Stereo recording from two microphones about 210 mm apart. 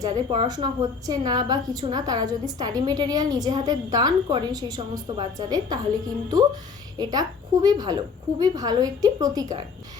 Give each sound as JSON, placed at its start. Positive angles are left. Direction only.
{"t": 0.0, "sound": "a woman's voice", "side_deg": -20}
{"t": 7.0, "sound": "a woman's voice", "side_deg": -20}